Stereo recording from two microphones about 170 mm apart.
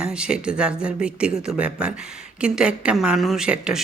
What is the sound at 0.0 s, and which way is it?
Speech, 5° right (ahead or behind).